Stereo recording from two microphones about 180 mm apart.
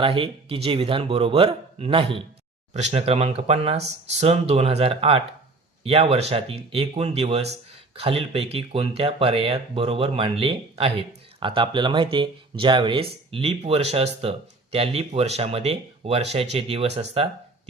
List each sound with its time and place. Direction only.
0.0 s speech: 30° right (ahead or behind)